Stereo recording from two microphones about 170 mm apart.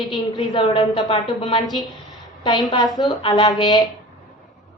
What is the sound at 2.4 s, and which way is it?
A woman's voice, 25° left (ahead or behind).